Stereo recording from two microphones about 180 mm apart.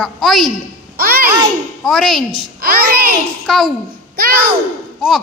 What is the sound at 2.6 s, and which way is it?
Speech, 55° right (ahead or behind).